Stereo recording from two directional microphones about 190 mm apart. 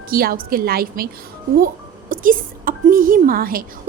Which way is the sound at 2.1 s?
45° right (ahead or behind).